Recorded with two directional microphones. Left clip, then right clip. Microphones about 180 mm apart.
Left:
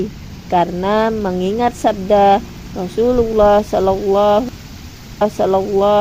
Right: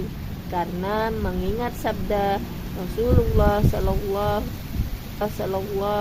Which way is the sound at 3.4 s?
40° left (ahead or behind).